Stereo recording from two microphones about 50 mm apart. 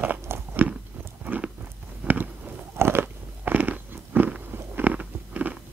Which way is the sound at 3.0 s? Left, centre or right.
Right.